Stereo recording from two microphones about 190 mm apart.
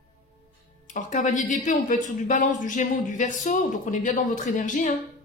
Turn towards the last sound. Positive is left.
turn(degrees=40)  # may be behind; listen again after turning